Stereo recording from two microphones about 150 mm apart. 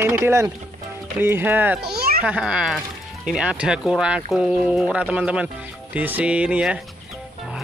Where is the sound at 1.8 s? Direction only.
90° right.